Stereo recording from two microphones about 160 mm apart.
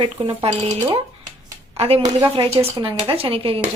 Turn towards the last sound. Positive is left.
turn(degrees=-35)  # may be behind; listen again after turning